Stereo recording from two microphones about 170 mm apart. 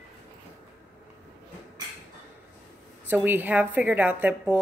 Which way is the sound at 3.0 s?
10° right (ahead or behind).